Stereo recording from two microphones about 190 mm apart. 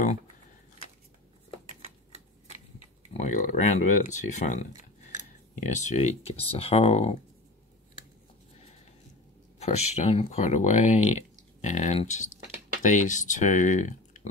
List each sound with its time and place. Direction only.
3.1 s speech: 40° left (ahead or behind)
5.7 s speech: 40° left (ahead or behind)
9.6 s speech: 35° left (ahead or behind)